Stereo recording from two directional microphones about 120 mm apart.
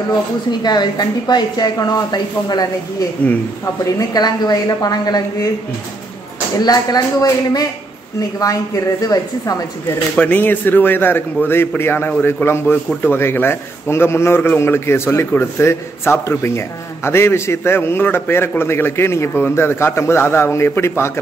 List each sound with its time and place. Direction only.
0.5 s speech: 35° left (ahead or behind)
3.2 s speech: 10° left (ahead or behind)
4.1 s speech: 35° left (ahead or behind)
6.6 s a man's voice: 35° left (ahead or behind)
10.1 s a man's voice: 10° left (ahead or behind)